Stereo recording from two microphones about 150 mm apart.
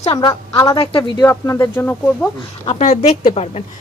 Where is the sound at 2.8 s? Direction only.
50° left (ahead or behind).